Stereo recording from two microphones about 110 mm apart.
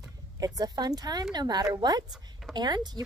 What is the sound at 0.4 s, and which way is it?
A woman's voice, 35° right (ahead or behind).